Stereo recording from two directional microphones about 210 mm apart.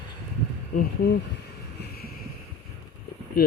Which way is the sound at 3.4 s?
45° left (ahead or behind).